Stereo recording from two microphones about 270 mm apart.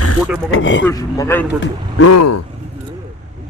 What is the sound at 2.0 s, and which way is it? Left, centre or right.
Speech, left.